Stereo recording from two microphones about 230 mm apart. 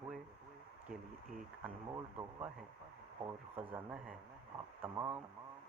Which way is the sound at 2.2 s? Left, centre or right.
Centre.